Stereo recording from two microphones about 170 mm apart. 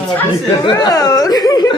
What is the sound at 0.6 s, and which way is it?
A woman's voice, 25° left (ahead or behind).